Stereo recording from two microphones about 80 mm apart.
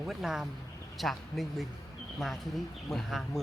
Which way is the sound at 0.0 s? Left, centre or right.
Centre.